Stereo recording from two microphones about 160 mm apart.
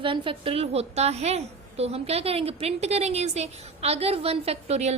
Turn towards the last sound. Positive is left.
turn(degrees=-45)  # may be behind; listen again after turning